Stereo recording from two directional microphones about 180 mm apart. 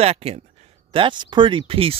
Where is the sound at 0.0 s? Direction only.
35° right (ahead or behind).